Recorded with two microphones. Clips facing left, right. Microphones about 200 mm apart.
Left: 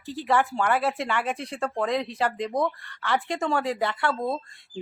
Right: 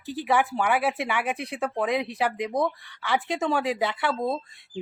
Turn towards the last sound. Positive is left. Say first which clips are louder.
# right 1 dB
turn(degrees=-5)  # may be behind; listen again after turning